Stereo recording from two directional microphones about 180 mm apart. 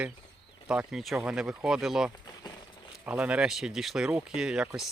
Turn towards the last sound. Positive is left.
turn(degrees=-5)  # may be behind; listen again after turning